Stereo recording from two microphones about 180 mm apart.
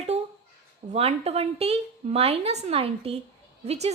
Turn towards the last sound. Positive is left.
turn(degrees=-35)  # may be behind; listen again after turning